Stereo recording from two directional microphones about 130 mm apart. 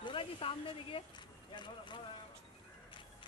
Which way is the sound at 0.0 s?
40° left (ahead or behind).